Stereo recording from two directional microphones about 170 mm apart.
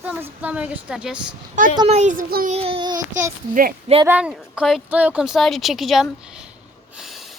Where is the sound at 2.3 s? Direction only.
60° right (ahead or behind).